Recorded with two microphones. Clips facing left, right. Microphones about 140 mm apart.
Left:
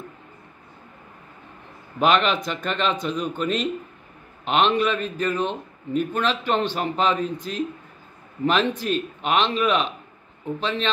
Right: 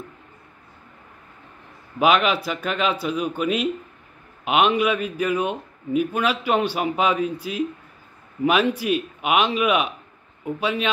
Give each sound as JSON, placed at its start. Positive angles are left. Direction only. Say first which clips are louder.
{"t": 2.0, "sound": "a man's voice", "louder": "right 1 dB", "side_deg": -5}